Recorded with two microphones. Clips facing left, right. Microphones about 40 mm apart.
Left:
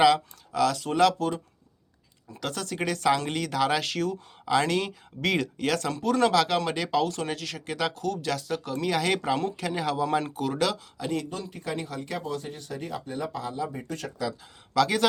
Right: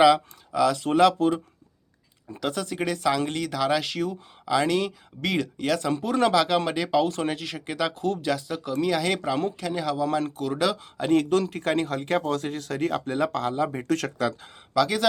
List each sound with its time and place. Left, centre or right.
0.0 s speech: centre
1.2 s speech: right
2.4 s speech: centre
2.7 s speech: centre
5.9 s speech: centre
7.9 s speech: right
8.2 s speech: centre
10.9 s speech: right
11.3 s speech: right
13.5 s speech: right
13.8 s speech: right
14.7 s speech: centre